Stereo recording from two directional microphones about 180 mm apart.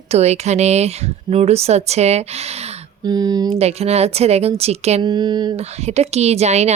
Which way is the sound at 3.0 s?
20° right (ahead or behind).